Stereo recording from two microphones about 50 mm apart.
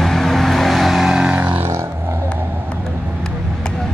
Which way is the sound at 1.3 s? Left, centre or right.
Right.